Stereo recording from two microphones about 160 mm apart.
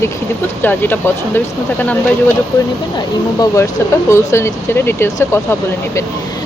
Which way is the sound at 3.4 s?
20° left (ahead or behind).